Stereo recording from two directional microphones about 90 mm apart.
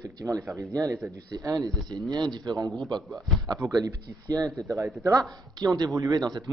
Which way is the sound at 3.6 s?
35° right (ahead or behind).